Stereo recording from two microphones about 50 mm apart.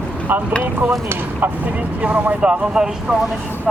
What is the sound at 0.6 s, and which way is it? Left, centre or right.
Speech, right.